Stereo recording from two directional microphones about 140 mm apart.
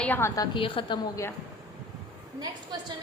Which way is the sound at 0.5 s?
40° left (ahead or behind).